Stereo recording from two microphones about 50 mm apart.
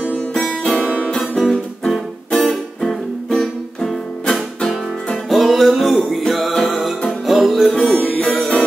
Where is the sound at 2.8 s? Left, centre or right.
Centre.